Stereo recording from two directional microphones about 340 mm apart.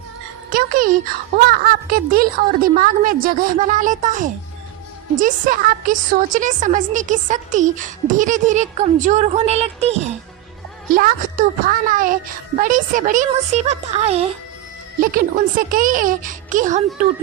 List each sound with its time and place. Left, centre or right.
0.5 s a woman's voice: right